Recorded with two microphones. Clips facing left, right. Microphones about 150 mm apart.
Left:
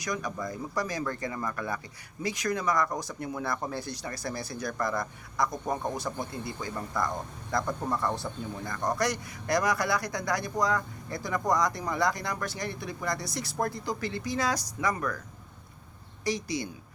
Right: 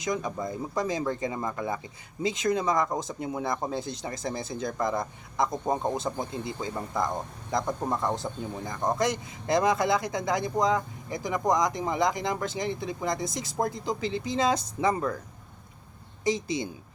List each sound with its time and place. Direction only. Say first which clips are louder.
0.0 s speech: right 3 dB; 25° right (ahead or behind)
16.2 s speech: right 3 dB; 20° right (ahead or behind)